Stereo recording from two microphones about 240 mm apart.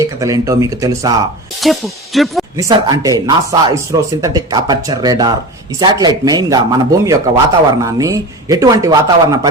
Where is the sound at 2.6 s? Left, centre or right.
Centre.